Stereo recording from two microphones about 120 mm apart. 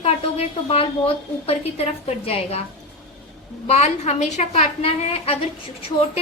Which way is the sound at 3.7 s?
70° left (ahead or behind).